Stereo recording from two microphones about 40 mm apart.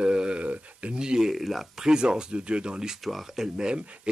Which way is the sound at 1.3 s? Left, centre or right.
Centre.